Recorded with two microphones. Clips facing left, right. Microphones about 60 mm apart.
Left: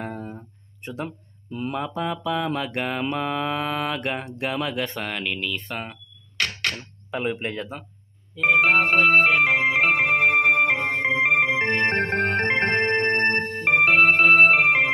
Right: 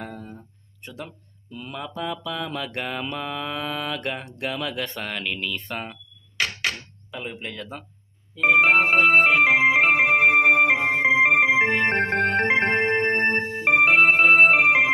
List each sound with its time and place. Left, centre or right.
0.0 s a sound: centre
0.8 s speech: left
1.8 s mantra: left; by 6.7 s centre
7.1 s speech: left
7.7 s mantra: centre
8.4 s organ: centre